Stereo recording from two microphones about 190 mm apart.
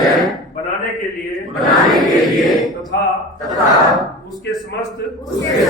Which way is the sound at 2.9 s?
60° left (ahead or behind).